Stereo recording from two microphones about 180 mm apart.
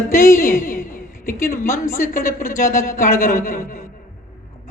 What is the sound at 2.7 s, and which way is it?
Speech, 50° left (ahead or behind).